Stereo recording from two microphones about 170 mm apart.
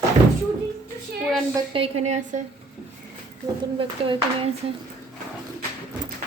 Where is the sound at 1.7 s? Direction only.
35° right (ahead or behind).